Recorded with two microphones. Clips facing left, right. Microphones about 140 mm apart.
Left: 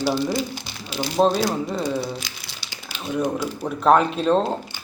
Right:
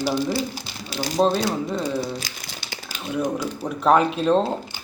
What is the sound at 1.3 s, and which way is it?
Speech, 15° left (ahead or behind).